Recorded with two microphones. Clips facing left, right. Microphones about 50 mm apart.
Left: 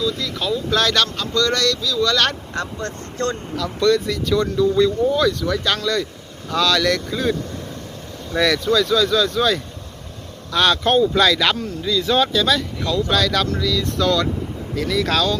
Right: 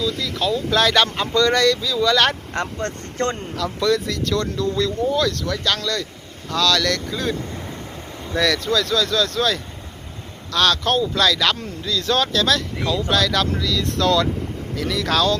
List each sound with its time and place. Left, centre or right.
0.0 s speech: centre
1.0 s speech: right
2.5 s speech: right
3.5 s speech: centre
8.4 s speech: centre
11.5 s speech: centre